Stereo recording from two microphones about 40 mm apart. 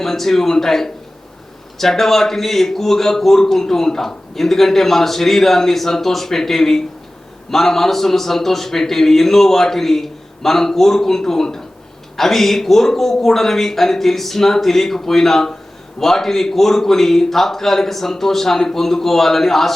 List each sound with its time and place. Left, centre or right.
0.0 s a man's voice: centre